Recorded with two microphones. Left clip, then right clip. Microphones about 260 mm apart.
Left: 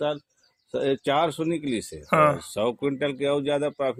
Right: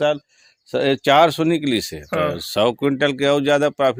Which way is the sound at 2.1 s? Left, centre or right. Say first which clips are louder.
Left 2 dB; centre.